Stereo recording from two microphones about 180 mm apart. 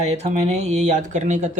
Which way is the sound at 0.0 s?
35° right (ahead or behind).